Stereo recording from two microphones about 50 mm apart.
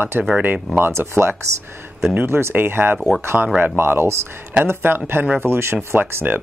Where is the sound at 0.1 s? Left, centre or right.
Right.